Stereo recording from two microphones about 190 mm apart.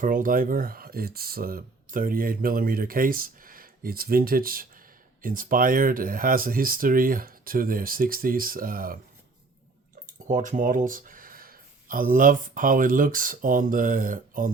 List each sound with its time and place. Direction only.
0.0 s speech: 45° right (ahead or behind)
10.2 s speech: 40° right (ahead or behind)